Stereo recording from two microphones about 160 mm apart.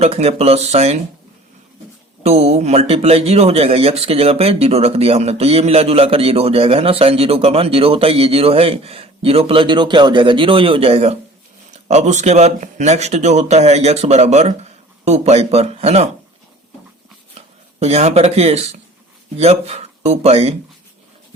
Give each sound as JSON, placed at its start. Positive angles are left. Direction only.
{"t": 0.0, "sound": "speech", "side_deg": -40}
{"t": 2.2, "sound": "speech", "side_deg": -40}
{"t": 17.7, "sound": "speech", "side_deg": -40}